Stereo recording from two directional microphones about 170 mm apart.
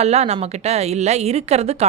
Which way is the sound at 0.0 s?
40° right (ahead or behind).